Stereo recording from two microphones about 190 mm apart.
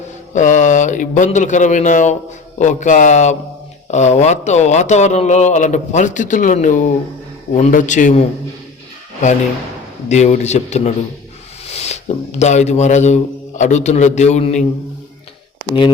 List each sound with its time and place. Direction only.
0.3 s speech: 40° left (ahead or behind)
10.1 s speech: 35° left (ahead or behind)
11.7 s a sound: 35° left (ahead or behind)
12.4 s speech: 35° left (ahead or behind)